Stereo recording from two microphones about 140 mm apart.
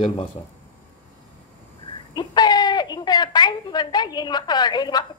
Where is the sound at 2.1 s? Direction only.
30° left (ahead or behind).